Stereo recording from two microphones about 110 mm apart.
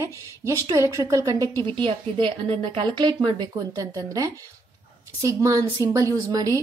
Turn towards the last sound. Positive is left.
turn(degrees=-35)  # may be behind; listen again after turning